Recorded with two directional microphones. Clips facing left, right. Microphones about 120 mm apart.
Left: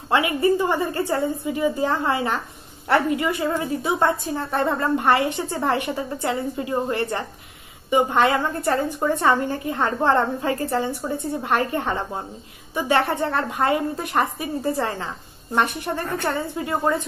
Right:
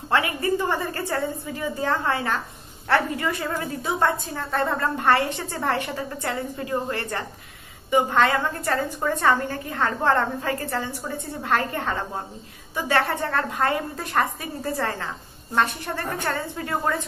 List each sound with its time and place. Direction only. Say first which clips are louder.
0.1 s a woman's voice: left 4 dB; 20° left (ahead or behind)